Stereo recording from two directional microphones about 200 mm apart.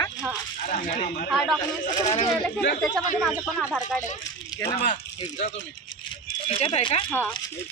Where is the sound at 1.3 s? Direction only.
Centre (ahead or behind).